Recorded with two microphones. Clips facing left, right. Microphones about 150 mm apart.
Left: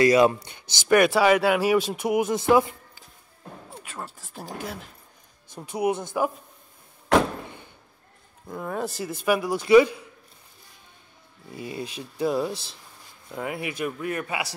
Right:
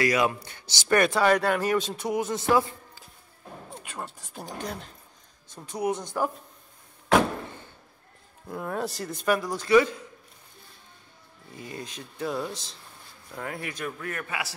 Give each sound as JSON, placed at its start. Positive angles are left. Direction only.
{"t": 0.0, "sound": "speech", "side_deg": 30}
{"t": 0.8, "sound": "speech", "side_deg": 10}
{"t": 3.8, "sound": "a man's voice", "side_deg": 5}
{"t": 8.5, "sound": "a man's voice", "side_deg": 0}
{"t": 11.5, "sound": "speech", "side_deg": 10}